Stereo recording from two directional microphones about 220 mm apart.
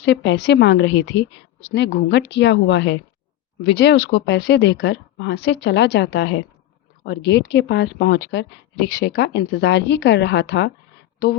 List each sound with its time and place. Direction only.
0.0 s speech: 50° left (ahead or behind)